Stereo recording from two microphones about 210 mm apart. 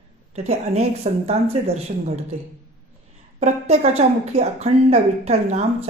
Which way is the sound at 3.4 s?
30° right (ahead or behind).